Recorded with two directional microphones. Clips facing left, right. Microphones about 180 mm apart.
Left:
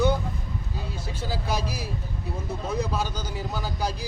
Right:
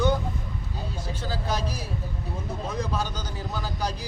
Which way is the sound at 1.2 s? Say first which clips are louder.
Left 1 dB; 10° left (ahead or behind).